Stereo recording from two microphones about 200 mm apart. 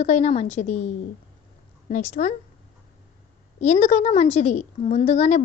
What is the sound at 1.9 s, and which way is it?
Speech, 35° left (ahead or behind).